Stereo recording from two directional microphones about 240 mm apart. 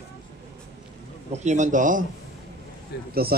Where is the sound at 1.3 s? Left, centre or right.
Right.